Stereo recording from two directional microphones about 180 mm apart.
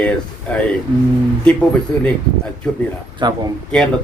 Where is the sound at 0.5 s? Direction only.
5° left (ahead or behind).